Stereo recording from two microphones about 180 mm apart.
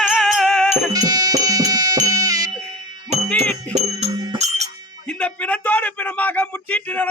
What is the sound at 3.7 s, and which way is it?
Music, 35° right (ahead or behind).